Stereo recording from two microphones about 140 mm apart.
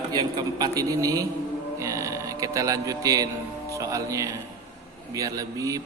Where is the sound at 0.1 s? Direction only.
30° right (ahead or behind).